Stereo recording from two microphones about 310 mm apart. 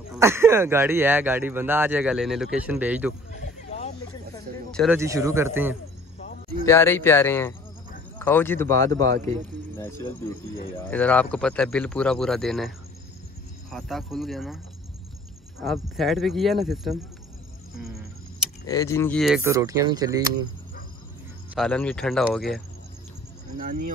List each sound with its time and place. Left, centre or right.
0.1 s speech: centre
3.3 s a sound: left
4.6 s speech: centre
4.9 s speech: centre
6.6 s speech: centre
15.6 s speech: centre
18.7 s speech: centre
21.5 s speech: centre
23.6 s speech: right